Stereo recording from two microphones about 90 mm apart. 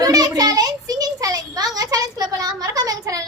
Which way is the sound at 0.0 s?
45° right (ahead or behind).